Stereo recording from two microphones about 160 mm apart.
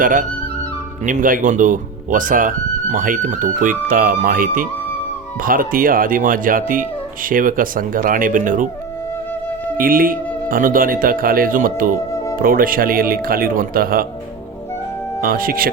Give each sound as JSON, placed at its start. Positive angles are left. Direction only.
{"t": 0.0, "sound": "speech", "side_deg": -55}
{"t": 9.7, "sound": "speech", "side_deg": -65}
{"t": 15.2, "sound": "speech", "side_deg": -65}